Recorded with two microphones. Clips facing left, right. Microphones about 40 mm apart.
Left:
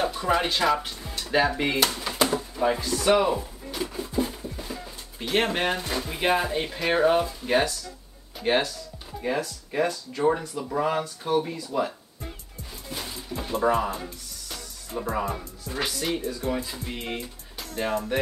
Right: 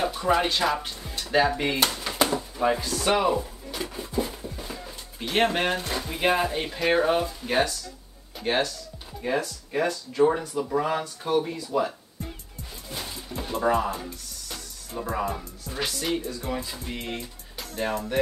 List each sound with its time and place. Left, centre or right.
0.1 s speech: centre
12.9 s music: centre
14.5 s speech: centre
17.0 s music: centre
17.6 s speech: centre